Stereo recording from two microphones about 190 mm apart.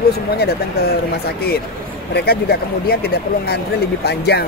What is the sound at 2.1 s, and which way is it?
Speech, 55° left (ahead or behind).